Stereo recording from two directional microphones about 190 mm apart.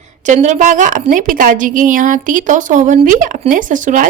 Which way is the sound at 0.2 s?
40° right (ahead or behind).